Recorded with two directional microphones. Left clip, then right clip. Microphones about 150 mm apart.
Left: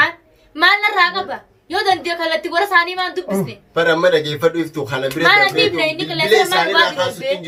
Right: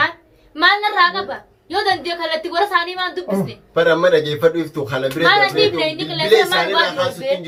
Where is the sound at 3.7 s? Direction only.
10° left (ahead or behind).